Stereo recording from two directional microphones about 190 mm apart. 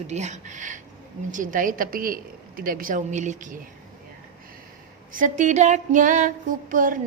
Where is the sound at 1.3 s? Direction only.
45° right (ahead or behind).